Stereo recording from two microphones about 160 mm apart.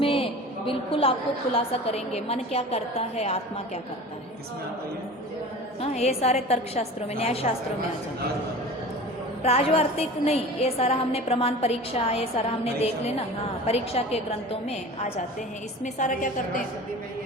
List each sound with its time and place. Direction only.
0.0 s a sound: 35° left (ahead or behind)
1.5 s a woman's voice: 40° left (ahead or behind)
5.8 s a woman's voice: 40° left (ahead or behind)
9.4 s a woman's voice: 40° left (ahead or behind)
13.7 s a woman's voice: 40° left (ahead or behind)
15.8 s a woman's voice: 50° left (ahead or behind)